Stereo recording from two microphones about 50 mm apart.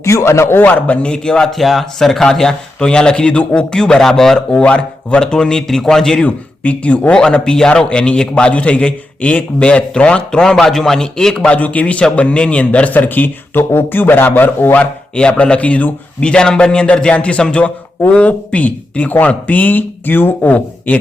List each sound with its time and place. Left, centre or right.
0.0 s speech: left
0.6 s speech: left
1.0 s speech: centre
1.5 s speech: centre
4.5 s a man's voice: left
6.2 s a man's voice: left
10.4 s speech: centre
11.4 s a man's voice: left
15.1 s a man's voice: left